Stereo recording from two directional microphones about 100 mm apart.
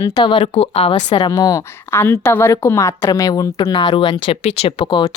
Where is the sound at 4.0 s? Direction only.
55° left (ahead or behind).